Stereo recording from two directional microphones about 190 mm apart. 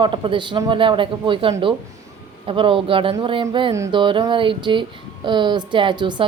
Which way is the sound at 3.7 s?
15° right (ahead or behind).